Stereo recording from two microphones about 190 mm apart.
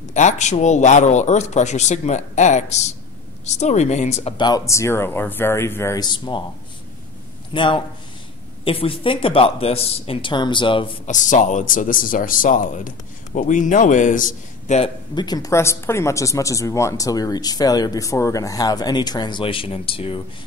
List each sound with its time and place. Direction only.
0.1 s speech: 40° left (ahead or behind)
7.5 s speech: 25° left (ahead or behind)
11.1 s speech: 40° left (ahead or behind)
15.1 s speech: 20° left (ahead or behind)